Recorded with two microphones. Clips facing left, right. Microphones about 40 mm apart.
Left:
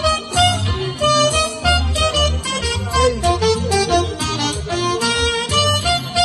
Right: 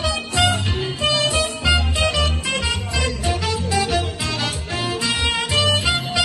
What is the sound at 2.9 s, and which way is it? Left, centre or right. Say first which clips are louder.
Music: left 12 dB; left.